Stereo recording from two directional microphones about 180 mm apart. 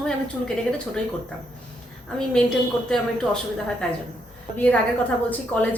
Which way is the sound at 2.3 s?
5° left (ahead or behind).